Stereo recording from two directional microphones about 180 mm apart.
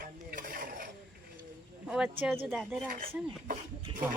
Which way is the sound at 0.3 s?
50° right (ahead or behind).